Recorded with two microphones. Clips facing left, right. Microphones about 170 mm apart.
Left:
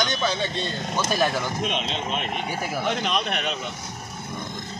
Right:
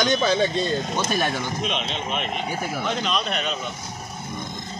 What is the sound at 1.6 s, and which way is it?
Speech, 45° left (ahead or behind).